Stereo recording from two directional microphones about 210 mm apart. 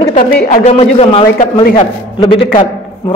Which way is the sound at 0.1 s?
40° left (ahead or behind).